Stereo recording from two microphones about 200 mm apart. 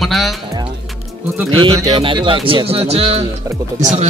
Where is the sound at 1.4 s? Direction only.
25° right (ahead or behind).